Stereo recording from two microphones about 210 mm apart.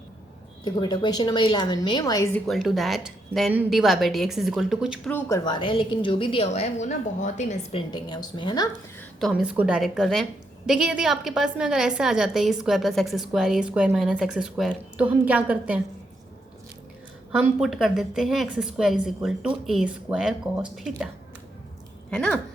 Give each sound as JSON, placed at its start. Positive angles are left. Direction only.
{"t": 0.6, "sound": "a woman's voice", "side_deg": 20}
{"t": 2.5, "sound": "a woman's voice", "side_deg": 0}
{"t": 5.1, "sound": "a woman's voice", "side_deg": 15}
{"t": 9.2, "sound": "a woman's voice", "side_deg": -5}
{"t": 17.4, "sound": "a woman's voice", "side_deg": 0}
{"t": 22.1, "sound": "a woman's voice", "side_deg": 5}